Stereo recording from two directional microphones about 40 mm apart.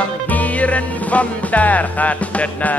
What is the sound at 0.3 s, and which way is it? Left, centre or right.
Speech, left.